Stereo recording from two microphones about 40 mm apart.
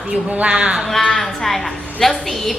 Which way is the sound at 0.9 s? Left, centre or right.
Centre.